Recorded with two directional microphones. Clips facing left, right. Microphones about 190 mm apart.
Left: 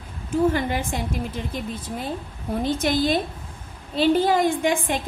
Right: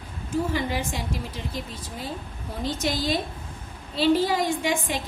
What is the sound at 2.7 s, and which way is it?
A woman's voice, 55° left (ahead or behind).